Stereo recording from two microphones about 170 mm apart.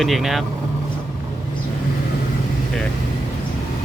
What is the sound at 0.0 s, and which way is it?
Speech, centre (ahead or behind).